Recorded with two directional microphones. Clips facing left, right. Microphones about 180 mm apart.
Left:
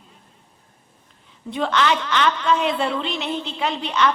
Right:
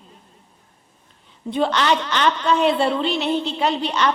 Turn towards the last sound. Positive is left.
turn(degrees=-35)  # may be behind; listen again after turning